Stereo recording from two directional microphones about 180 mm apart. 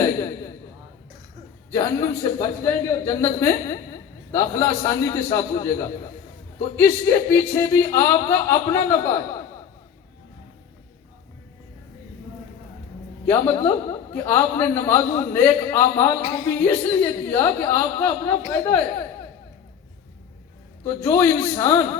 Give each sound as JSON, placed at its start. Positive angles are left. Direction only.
{"t": 0.0, "sound": "a sound", "side_deg": 20}
{"t": 1.7, "sound": "a man's voice", "side_deg": 20}
{"t": 7.0, "sound": "speech", "side_deg": 15}
{"t": 13.2, "sound": "speech", "side_deg": 15}
{"t": 20.8, "sound": "speech", "side_deg": 15}